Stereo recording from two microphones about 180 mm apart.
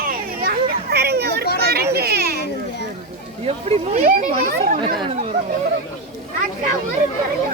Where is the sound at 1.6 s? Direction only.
60° right (ahead or behind).